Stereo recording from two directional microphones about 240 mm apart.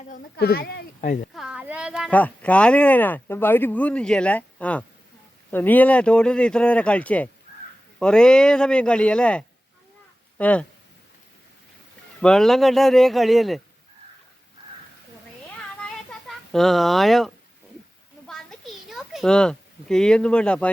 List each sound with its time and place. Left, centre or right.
0.0 s speech: left
1.3 s speech: centre
12.2 s speech: centre
15.4 s a sound: centre